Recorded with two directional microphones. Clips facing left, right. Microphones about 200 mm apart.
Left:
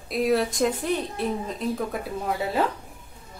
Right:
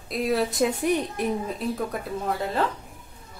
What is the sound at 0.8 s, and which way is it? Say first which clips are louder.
Speech: right 2 dB; 10° right (ahead or behind).